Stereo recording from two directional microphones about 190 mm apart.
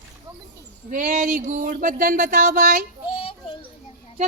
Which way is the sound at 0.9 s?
40° right (ahead or behind).